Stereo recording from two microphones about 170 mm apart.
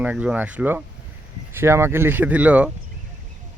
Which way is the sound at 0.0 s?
10° right (ahead or behind).